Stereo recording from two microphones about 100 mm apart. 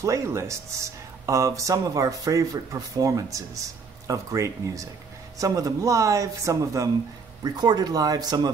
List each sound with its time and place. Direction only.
0.0 s speech: 30° right (ahead or behind)